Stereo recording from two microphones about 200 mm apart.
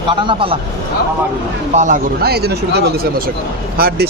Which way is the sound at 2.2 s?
55° right (ahead or behind).